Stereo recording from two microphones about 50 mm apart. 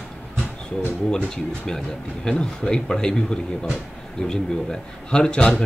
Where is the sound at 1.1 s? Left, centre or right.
Centre.